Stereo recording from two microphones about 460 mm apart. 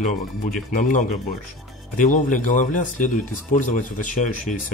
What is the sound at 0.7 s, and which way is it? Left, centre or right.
Speech, centre.